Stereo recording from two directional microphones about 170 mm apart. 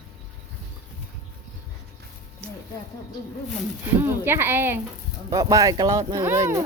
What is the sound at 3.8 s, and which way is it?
Speech, 15° right (ahead or behind).